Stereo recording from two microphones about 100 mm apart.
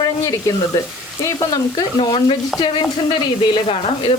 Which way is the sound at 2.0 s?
50° left (ahead or behind).